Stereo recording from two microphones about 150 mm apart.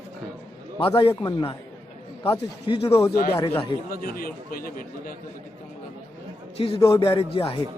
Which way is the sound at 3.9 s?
75° left (ahead or behind).